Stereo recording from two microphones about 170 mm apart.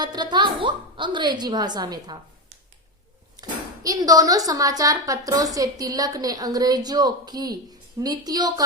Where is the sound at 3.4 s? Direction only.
20° right (ahead or behind).